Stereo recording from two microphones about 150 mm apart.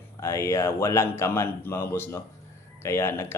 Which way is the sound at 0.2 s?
20° left (ahead or behind).